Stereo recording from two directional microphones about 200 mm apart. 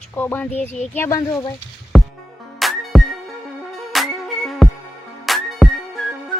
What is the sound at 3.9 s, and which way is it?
Music, centre (ahead or behind).